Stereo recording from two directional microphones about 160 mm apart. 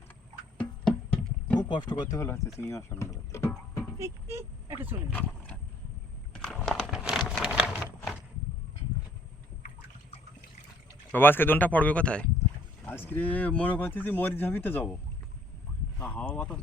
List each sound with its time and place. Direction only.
0.9 s music: 10° left (ahead or behind)
1.5 s speech: 30° left (ahead or behind)
3.9 s vehicle: 15° right (ahead or behind)
6.3 s a sound: centre (ahead or behind)
11.1 s speech: 10° left (ahead or behind)
16.0 s speech: 10° left (ahead or behind)